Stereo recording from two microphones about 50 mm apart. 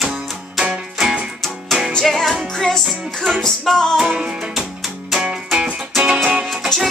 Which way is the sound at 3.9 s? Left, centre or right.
Centre.